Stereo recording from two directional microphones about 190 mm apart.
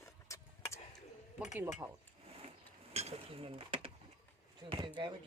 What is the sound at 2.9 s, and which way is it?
Speech, 35° right (ahead or behind).